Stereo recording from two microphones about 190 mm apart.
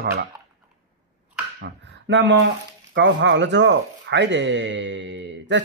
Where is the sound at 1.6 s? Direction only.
70° right (ahead or behind).